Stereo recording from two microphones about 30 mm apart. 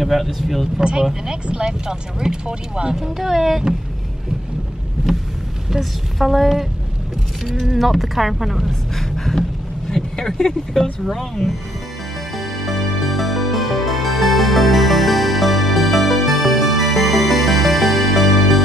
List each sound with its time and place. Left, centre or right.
0.0 s a woman's voice: centre
0.8 s speech: right
3.2 s speech: centre
5.0 s boat: centre
5.7 s a woman's voice: centre
8.9 s a sound: centre
9.8 s speech: centre
12.4 s music: centre